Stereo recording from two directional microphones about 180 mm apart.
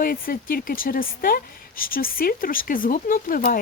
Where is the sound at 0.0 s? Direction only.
55° left (ahead or behind).